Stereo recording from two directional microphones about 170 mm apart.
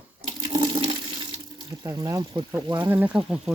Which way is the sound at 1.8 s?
20° right (ahead or behind).